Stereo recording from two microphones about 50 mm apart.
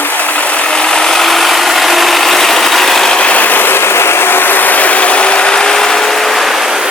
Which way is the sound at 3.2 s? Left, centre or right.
Left.